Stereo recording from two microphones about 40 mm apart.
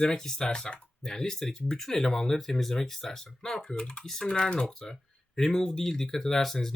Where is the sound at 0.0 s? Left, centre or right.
Centre.